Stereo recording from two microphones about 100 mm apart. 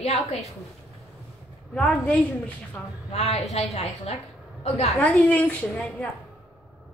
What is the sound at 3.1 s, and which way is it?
A woman's voice, 90° left.